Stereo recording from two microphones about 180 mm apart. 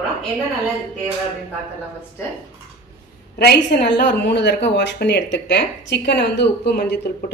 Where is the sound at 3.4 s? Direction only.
65° left (ahead or behind).